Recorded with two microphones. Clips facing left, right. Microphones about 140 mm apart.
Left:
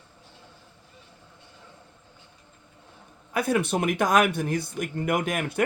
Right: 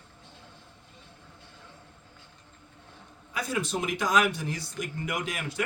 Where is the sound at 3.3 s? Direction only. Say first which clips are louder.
Left 6 dB; 60° left (ahead or behind).